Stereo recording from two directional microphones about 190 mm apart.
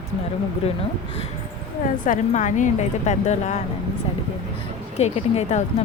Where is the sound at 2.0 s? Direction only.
40° left (ahead or behind).